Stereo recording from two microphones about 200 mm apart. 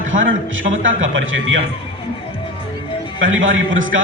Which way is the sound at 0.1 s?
75° right (ahead or behind).